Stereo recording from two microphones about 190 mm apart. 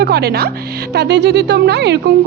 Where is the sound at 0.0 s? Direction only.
55° right (ahead or behind).